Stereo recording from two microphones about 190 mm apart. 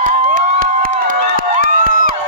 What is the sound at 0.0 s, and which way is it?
Crowd, 45° right (ahead or behind).